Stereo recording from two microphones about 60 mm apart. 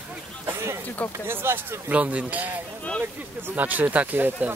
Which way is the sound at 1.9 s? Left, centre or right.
Right.